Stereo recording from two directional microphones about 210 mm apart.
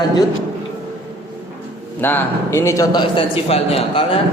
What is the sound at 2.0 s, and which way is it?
A man's voice, 10° left (ahead or behind).